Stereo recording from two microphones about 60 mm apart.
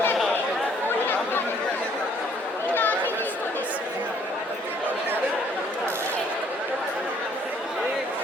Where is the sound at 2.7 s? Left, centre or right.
Left.